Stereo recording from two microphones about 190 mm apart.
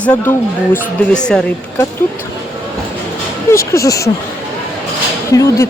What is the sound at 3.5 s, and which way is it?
Speech, 15° left (ahead or behind).